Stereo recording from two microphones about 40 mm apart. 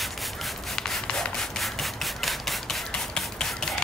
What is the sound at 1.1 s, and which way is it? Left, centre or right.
Rub, centre.